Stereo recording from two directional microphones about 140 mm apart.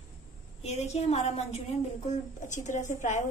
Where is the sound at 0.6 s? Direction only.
50° left (ahead or behind).